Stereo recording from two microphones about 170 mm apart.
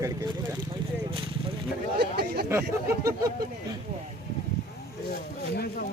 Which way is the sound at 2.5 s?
15° right (ahead or behind).